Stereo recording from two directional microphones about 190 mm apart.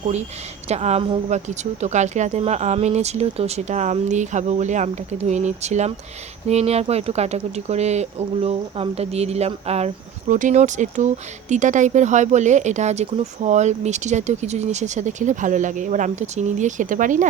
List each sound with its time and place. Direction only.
0.7 s speech: 35° right (ahead or behind)